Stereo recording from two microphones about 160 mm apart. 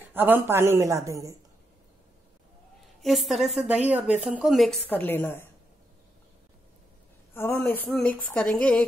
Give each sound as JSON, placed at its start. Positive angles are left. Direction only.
{"t": 0.1, "sound": "a woman's voice", "side_deg": -10}
{"t": 3.0, "sound": "a woman's voice", "side_deg": 0}
{"t": 4.8, "sound": "speech", "side_deg": 10}
{"t": 7.3, "sound": "a woman's voice", "side_deg": 15}